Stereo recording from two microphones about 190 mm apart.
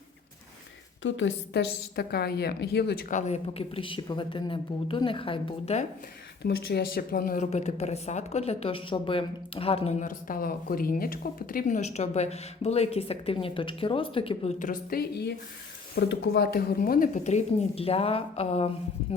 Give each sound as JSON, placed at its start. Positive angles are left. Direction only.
{"t": 1.0, "sound": "speech", "side_deg": 80}
{"t": 6.4, "sound": "speech", "side_deg": 60}
{"t": 14.6, "sound": "speech", "side_deg": 50}